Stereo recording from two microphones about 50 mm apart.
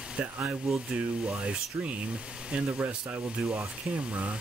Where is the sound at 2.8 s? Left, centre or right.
Right.